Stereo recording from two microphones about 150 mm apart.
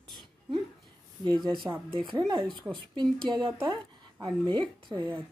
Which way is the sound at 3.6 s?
30° right (ahead or behind).